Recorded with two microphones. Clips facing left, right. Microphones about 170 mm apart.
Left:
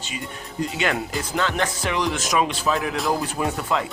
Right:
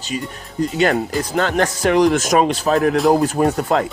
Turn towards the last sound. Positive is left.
turn(degrees=-40)  # may be behind; listen again after turning